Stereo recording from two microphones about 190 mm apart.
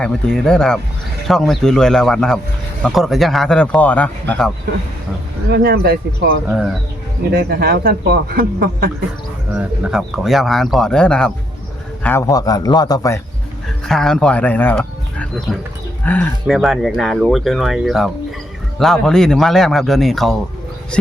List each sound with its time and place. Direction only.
0.0 s speech: 5° left (ahead or behind)
5.5 s speech: 55° right (ahead or behind)
9.5 s speech: 5° right (ahead or behind)
12.0 s a man's voice: 15° left (ahead or behind)
13.8 s speech: centre (ahead or behind)